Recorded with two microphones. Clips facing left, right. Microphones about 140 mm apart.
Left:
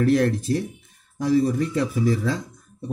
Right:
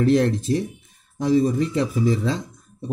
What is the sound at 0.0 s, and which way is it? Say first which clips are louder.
Speech: right 1 dB; 20° right (ahead or behind).